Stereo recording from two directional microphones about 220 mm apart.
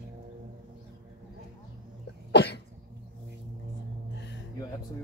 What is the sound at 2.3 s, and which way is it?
Cough, 50° left (ahead or behind).